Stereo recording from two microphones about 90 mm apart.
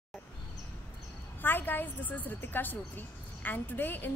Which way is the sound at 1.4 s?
20° left (ahead or behind).